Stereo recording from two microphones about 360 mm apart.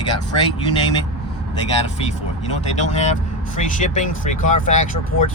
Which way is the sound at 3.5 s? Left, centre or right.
Left.